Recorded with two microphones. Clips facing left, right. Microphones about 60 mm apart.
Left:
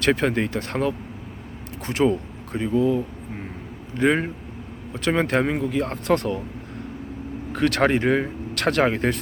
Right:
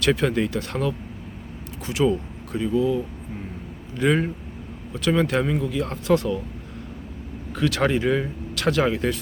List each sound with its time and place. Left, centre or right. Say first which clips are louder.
0.0 s speech: even; left
7.5 s speech: left 2 dB; left